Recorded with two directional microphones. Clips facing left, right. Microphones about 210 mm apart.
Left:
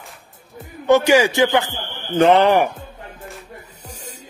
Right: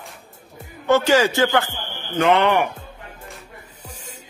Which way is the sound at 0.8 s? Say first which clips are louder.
Left 3 dB; 15° left (ahead or behind).